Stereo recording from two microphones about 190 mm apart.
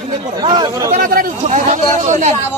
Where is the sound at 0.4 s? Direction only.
20° right (ahead or behind).